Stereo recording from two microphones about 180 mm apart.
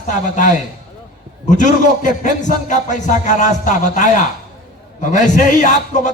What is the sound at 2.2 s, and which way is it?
Speech, 45° left (ahead or behind).